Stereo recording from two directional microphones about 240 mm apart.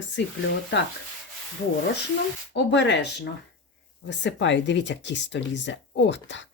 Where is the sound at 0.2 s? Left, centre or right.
Left.